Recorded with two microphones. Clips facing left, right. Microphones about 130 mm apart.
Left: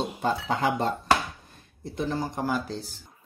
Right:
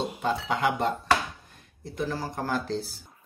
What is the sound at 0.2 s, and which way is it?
Speech, 35° left (ahead or behind).